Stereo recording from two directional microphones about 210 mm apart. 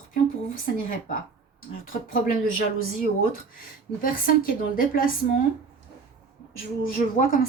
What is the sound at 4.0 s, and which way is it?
A woman's voice, 40° left (ahead or behind).